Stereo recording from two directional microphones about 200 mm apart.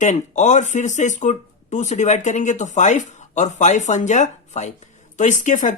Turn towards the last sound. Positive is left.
turn(degrees=40)  # may be behind; listen again after turning